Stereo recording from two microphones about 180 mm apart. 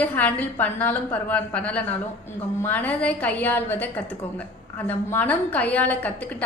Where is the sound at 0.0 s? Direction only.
10° left (ahead or behind).